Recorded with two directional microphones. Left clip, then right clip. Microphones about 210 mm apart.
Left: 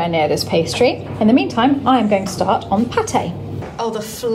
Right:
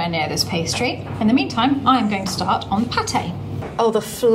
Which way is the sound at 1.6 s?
5° right (ahead or behind).